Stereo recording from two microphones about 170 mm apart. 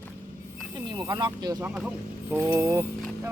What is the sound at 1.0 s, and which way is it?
Speech, 25° right (ahead or behind).